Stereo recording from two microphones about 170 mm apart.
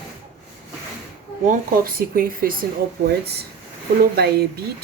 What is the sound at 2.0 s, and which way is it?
Speech, 60° right (ahead or behind).